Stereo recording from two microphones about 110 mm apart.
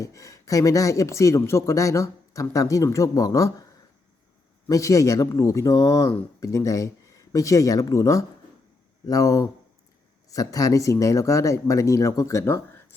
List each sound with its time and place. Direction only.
0.0 s speech: 30° left (ahead or behind)
4.7 s speech: 30° left (ahead or behind)